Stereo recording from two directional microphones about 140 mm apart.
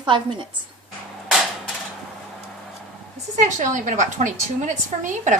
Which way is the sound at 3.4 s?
60° right (ahead or behind).